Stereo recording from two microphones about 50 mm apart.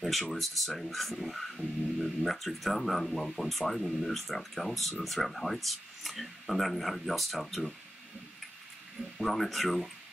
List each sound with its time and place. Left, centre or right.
0.0 s speech: centre
9.2 s speech: centre